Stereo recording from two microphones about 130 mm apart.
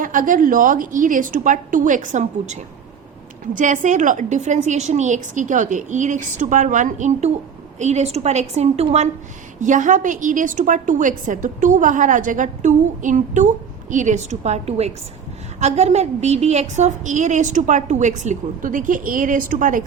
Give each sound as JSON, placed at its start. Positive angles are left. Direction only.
{"t": 0.0, "sound": "a woman's voice", "side_deg": -90}
{"t": 3.4, "sound": "a woman's voice", "side_deg": -85}
{"t": 9.6, "sound": "a woman's voice", "side_deg": -80}